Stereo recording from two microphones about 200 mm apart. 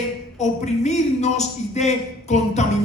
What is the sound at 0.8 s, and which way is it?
Speech, 35° left (ahead or behind).